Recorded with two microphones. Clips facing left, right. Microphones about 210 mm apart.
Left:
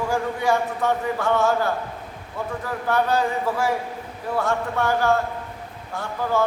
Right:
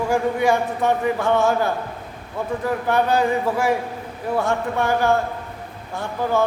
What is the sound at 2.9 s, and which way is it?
Speech, 15° right (ahead or behind).